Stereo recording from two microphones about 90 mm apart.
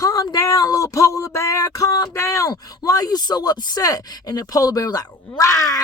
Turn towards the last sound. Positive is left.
turn(degrees=35)  # may be behind; listen again after turning